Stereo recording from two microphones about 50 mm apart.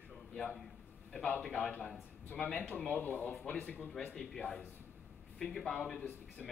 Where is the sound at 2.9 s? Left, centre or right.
Left.